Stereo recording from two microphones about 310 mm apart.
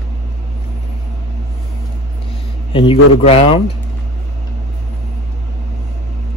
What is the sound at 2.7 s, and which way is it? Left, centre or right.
Speech, centre.